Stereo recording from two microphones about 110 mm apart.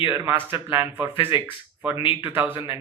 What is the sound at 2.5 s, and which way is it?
Speech, 55° left (ahead or behind).